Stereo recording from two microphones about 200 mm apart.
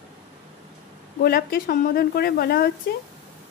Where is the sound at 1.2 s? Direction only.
50° left (ahead or behind).